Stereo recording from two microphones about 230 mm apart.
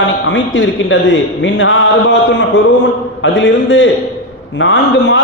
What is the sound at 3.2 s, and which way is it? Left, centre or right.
A man's voice, left.